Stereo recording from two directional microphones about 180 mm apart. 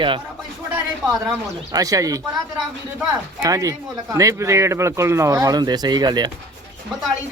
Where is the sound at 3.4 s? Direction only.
20° right (ahead or behind).